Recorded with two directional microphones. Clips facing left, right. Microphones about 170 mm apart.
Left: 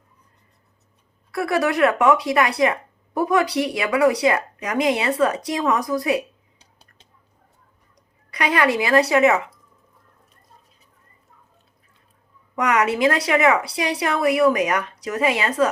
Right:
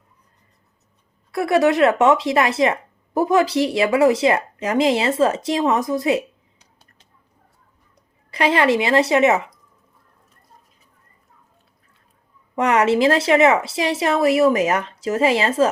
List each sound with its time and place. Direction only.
1.3 s a woman's voice: 20° right (ahead or behind)
8.3 s a woman's voice: 30° right (ahead or behind)
12.5 s a woman's voice: 30° right (ahead or behind)